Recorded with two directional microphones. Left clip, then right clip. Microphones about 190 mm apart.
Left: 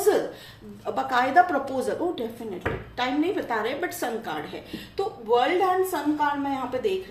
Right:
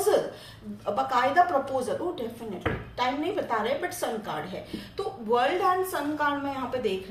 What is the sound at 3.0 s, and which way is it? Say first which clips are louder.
Speech: left 2 dB; 40° left (ahead or behind).